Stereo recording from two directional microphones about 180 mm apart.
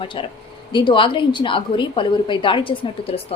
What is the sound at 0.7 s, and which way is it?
A woman's voice, 25° left (ahead or behind).